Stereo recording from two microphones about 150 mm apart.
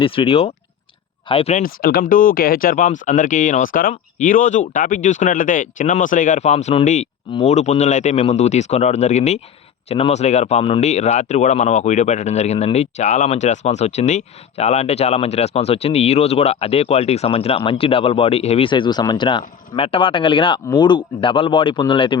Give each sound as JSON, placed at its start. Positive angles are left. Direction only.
{"t": 0.0, "sound": "speech", "side_deg": 35}
{"t": 1.5, "sound": "speech", "side_deg": 75}